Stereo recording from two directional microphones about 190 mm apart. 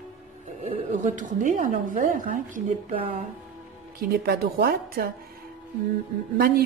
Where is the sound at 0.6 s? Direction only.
40° right (ahead or behind).